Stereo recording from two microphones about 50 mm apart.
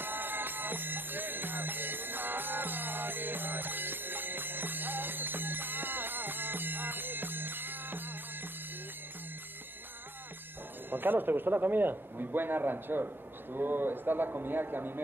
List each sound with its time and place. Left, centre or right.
0.0 s music: right
10.9 s a man's voice: right